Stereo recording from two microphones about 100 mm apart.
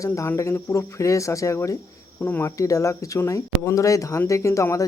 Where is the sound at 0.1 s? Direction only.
25° left (ahead or behind).